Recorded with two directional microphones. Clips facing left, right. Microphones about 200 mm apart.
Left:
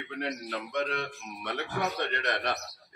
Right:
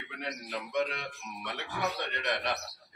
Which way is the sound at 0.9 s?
50° left (ahead or behind).